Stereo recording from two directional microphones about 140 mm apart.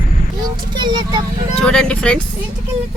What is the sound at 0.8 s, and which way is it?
Speech, 35° right (ahead or behind).